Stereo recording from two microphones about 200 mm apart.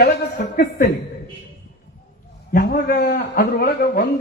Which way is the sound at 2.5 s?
45° left (ahead or behind).